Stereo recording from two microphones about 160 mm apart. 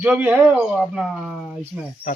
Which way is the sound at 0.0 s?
10° right (ahead or behind).